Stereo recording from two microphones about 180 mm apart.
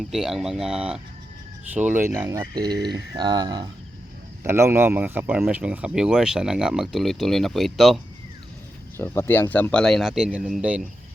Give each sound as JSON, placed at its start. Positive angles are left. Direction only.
{"t": 0.0, "sound": "speech", "side_deg": 0}
{"t": 9.0, "sound": "speech", "side_deg": 15}